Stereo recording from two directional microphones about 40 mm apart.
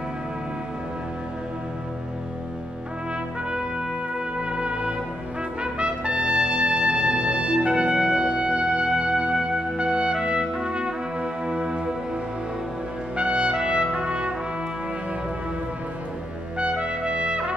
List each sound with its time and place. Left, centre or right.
3.4 s trumpet: right
9.2 s music: centre
10.5 s brass instrument: right
13.1 s trumpet: right
13.9 s brass instrument: right
16.5 s trumpet: right